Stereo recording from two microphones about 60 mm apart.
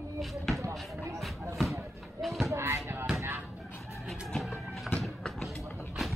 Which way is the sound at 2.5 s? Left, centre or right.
Right.